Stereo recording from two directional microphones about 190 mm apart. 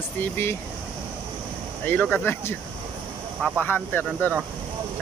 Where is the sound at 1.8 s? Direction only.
10° left (ahead or behind).